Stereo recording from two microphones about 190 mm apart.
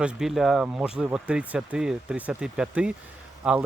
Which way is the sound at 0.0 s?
5° right (ahead or behind).